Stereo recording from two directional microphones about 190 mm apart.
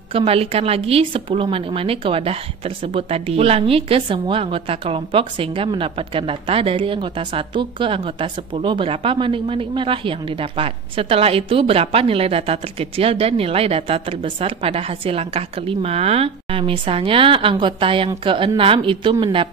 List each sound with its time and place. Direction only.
0.1 s a woman's voice: 30° right (ahead or behind)